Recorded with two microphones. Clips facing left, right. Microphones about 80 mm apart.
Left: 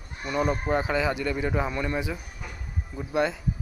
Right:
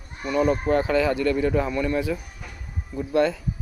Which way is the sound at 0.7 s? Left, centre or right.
Centre.